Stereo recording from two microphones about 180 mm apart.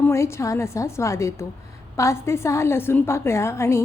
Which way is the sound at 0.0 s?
15° left (ahead or behind).